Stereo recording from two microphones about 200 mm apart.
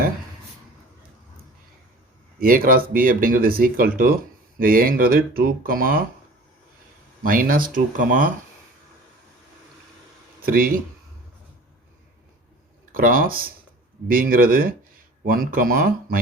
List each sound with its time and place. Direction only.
2.4 s speech: 45° right (ahead or behind)
7.2 s speech: 45° right (ahead or behind)
10.4 s speech: 45° right (ahead or behind)
12.9 s speech: 45° right (ahead or behind)